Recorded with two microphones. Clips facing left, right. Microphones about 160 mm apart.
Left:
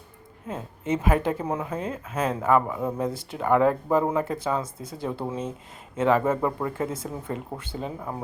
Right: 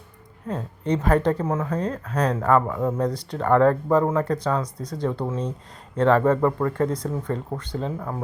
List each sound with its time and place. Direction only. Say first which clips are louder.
0.4 s speech: right 4 dB; 5° left (ahead or behind)